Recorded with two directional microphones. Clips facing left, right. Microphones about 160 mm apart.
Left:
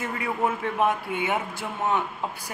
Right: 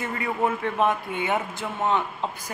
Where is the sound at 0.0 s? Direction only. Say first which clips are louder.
Right 1 dB; 5° left (ahead or behind).